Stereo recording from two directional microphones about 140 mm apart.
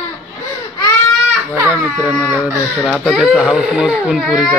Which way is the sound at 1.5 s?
15° right (ahead or behind).